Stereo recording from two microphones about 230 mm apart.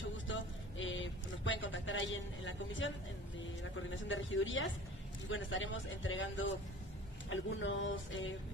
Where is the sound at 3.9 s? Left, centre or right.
Left.